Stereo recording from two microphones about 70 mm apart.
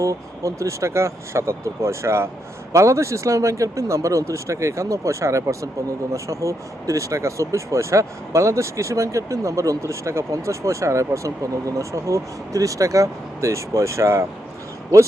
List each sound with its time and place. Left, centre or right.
0.0 s speech: right